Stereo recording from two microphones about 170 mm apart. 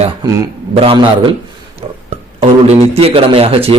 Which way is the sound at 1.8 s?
35° right (ahead or behind).